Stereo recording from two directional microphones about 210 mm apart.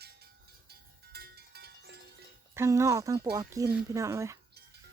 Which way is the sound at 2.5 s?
15° right (ahead or behind).